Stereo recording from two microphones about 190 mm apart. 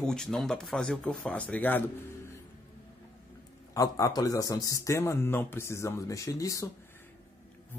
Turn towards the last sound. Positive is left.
turn(degrees=15)  # may be behind; listen again after turning